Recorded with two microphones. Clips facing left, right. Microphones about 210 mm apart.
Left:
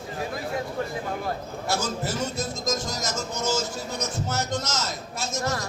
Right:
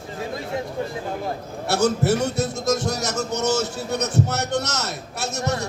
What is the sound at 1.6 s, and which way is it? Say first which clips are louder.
Speech: right 9 dB; 70° right (ahead or behind).